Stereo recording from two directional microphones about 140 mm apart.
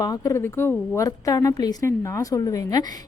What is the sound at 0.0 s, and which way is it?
A woman's voice, 25° left (ahead or behind).